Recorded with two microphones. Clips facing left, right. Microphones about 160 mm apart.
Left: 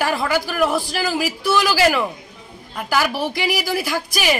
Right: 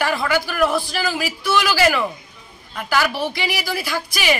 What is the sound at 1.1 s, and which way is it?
Speech, 40° left (ahead or behind).